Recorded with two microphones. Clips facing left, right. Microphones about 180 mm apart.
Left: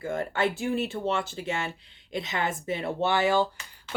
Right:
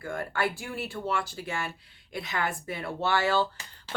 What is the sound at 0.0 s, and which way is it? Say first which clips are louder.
Speech: left 3 dB; 20° left (ahead or behind).